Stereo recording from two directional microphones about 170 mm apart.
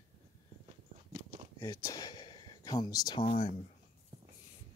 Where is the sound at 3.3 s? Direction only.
45° left (ahead or behind).